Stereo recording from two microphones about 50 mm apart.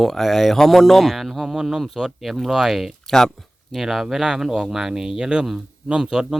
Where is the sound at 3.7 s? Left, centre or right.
Centre.